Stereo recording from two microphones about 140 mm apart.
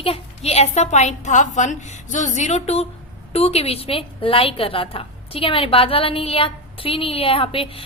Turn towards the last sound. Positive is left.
turn(degrees=40)  # may be behind; listen again after turning